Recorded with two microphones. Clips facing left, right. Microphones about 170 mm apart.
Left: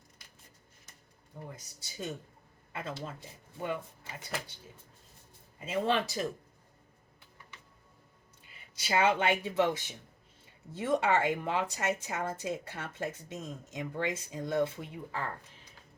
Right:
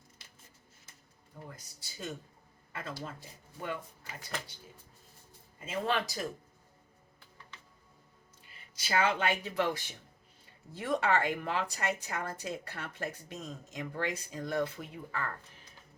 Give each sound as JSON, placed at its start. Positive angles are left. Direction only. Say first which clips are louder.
{"t": 1.5, "sound": "speech", "louder": "left 3 dB", "side_deg": 20}
{"t": 5.5, "sound": "speech", "louder": "left 3 dB", "side_deg": 25}
{"t": 8.8, "sound": "speech", "louder": "left 2 dB", "side_deg": 25}